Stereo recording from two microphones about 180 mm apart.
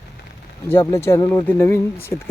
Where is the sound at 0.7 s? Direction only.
15° left (ahead or behind).